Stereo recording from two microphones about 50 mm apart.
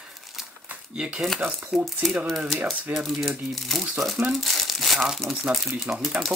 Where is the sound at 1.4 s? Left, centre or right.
Right.